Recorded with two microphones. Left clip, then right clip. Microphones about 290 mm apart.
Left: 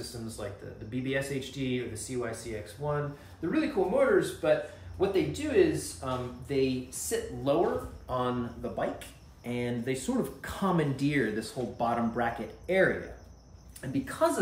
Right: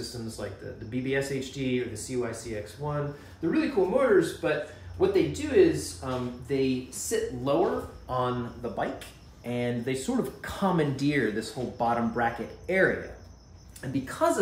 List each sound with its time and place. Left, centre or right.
0.4 s speech: centre